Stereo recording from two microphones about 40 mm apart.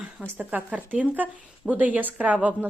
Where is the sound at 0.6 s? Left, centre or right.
Right.